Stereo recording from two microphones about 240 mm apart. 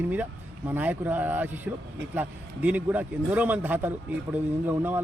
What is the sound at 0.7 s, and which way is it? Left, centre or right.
A man's voice, centre.